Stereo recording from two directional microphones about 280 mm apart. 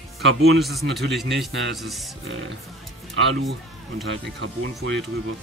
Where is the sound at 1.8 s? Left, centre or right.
Centre.